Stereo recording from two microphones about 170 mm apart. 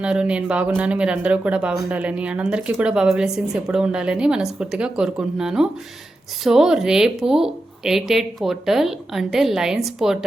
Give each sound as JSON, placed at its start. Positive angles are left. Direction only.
{"t": 0.0, "sound": "speech", "side_deg": -5}